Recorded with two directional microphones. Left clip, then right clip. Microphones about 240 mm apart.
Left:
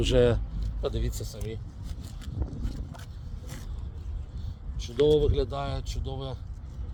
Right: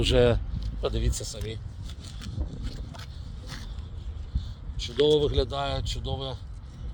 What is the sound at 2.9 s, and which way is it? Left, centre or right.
Vehicle, centre.